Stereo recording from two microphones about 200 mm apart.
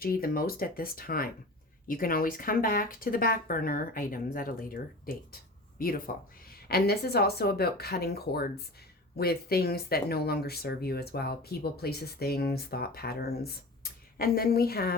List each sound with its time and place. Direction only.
0.0 s speech: 45° left (ahead or behind)